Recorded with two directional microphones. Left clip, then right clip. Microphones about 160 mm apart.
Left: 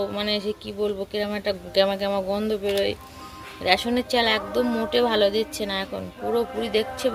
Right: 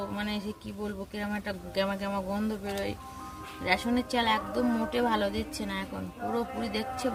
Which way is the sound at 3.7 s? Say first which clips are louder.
Left 7 dB; 25° right (ahead or behind).